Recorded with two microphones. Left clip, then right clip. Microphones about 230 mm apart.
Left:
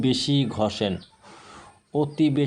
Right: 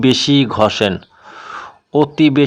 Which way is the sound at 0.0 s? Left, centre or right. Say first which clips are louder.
Right 11 dB; right.